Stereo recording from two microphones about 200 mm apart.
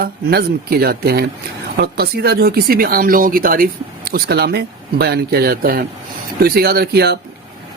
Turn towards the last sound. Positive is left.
turn(degrees=-55)  # may be behind; listen again after turning